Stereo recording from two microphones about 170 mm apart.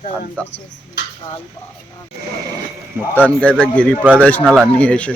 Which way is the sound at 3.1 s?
10° left (ahead or behind).